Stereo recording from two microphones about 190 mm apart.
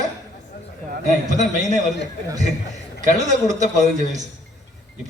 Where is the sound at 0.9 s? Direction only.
40° right (ahead or behind).